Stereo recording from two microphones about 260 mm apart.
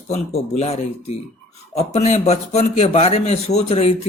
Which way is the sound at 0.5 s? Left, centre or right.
Left.